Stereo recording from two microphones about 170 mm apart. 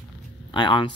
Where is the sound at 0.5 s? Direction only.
25° left (ahead or behind).